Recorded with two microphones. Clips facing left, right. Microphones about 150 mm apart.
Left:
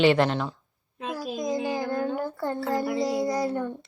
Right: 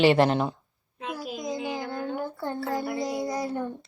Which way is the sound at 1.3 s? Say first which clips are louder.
Left 5 dB; 20° left (ahead or behind).